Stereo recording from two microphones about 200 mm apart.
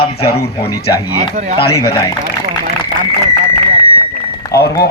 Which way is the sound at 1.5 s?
25° left (ahead or behind).